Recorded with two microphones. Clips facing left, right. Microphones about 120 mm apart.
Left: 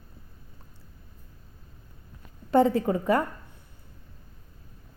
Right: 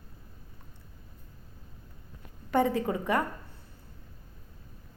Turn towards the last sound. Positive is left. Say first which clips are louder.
# left 4 dB
turn(degrees=20)  # may be behind; listen again after turning